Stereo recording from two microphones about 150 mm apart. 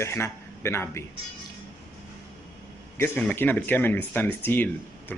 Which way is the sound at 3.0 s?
10° left (ahead or behind).